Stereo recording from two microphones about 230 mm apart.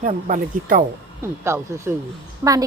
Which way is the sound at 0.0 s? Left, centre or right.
Right.